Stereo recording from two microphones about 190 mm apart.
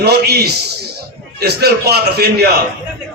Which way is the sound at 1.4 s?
55° right (ahead or behind).